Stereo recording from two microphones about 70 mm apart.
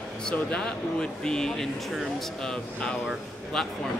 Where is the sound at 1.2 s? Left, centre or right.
Centre.